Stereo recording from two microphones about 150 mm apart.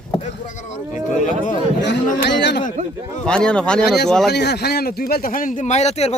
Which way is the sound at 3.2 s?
5° left (ahead or behind).